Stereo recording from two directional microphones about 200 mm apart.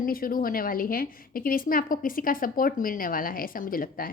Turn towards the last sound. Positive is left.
turn(degrees=45)  # may be behind; listen again after turning